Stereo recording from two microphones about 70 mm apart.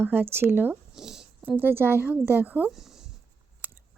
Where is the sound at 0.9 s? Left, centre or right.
Centre.